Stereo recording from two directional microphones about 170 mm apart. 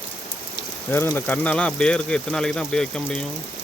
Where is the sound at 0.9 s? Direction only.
10° left (ahead or behind).